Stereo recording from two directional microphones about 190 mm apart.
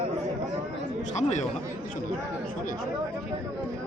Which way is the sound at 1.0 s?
40° left (ahead or behind).